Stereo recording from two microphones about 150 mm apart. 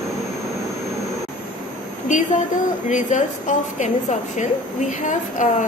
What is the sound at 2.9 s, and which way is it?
A woman's voice, 55° left (ahead or behind).